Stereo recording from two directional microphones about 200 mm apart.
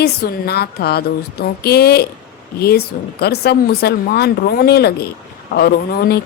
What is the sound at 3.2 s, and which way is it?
Speech, 55° left (ahead or behind).